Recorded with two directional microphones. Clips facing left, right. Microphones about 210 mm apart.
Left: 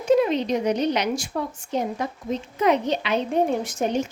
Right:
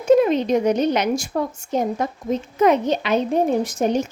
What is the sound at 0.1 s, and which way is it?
A woman's voice, 50° right (ahead or behind).